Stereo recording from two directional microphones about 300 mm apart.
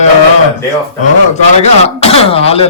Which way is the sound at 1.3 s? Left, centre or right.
Left.